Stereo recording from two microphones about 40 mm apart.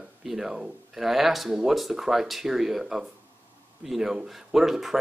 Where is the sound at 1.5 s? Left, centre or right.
Centre.